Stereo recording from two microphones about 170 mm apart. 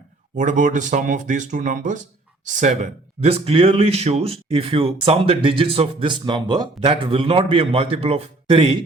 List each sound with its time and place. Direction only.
0.3 s speech: 50° right (ahead or behind); by 8.8 s 30° right (ahead or behind)